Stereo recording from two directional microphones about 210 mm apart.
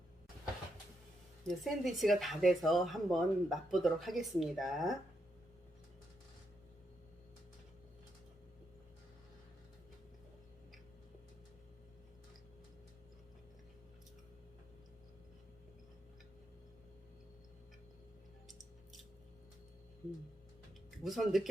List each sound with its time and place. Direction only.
1.5 s speech: centre (ahead or behind)
21.0 s speech: centre (ahead or behind)